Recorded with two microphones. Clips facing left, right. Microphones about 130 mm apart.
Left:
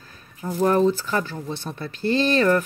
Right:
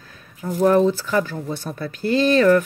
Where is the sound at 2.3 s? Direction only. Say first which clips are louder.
Right 6 dB; 35° left (ahead or behind).